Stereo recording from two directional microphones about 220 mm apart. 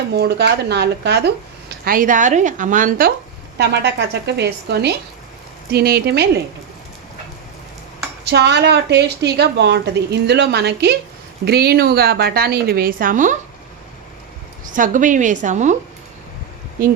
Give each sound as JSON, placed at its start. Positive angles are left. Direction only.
{"t": 0.1, "sound": "a woman's voice", "side_deg": -45}
{"t": 1.8, "sound": "a woman's voice", "side_deg": -40}
{"t": 3.6, "sound": "a woman's voice", "side_deg": -50}
{"t": 8.2, "sound": "a woman's voice", "side_deg": -50}
{"t": 14.7, "sound": "a woman's voice", "side_deg": -35}